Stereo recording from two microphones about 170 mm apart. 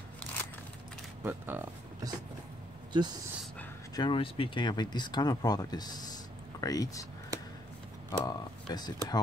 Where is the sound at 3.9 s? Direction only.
30° left (ahead or behind).